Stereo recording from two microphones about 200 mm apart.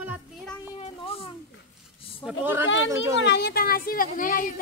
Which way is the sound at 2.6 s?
70° left (ahead or behind).